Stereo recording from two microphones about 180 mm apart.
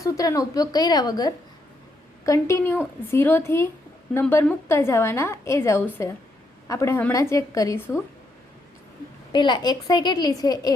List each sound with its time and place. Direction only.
0.0 s a woman's voice: 20° left (ahead or behind)
9.3 s a woman's voice: 25° left (ahead or behind)